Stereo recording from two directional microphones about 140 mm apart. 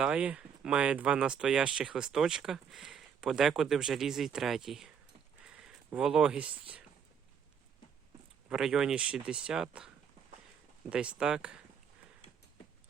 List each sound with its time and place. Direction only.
0.0 s speech: 10° right (ahead or behind)
8.4 s speech: 5° right (ahead or behind)